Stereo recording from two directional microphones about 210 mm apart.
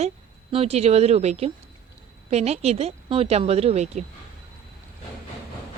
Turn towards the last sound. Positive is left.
turn(degrees=-30)  # may be behind; listen again after turning